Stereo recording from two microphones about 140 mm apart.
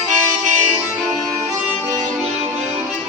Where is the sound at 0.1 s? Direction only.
60° right (ahead or behind).